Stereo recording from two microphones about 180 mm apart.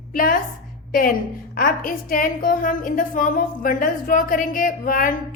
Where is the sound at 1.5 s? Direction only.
50° left (ahead or behind).